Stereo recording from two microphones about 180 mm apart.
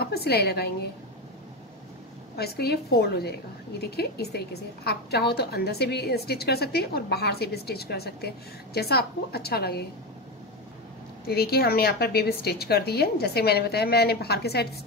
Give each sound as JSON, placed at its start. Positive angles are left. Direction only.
{"t": 0.0, "sound": "a woman's voice", "side_deg": 60}
{"t": 2.3, "sound": "a woman's voice", "side_deg": 60}
{"t": 11.2, "sound": "a woman's voice", "side_deg": 60}